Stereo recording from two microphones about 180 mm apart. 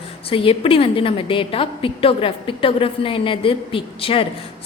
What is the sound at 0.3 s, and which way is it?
A woman's voice, 30° left (ahead or behind).